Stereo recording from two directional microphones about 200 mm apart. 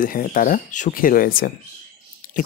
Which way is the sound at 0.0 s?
45° left (ahead or behind).